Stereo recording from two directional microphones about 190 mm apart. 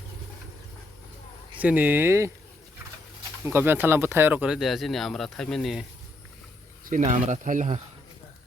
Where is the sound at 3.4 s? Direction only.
10° right (ahead or behind).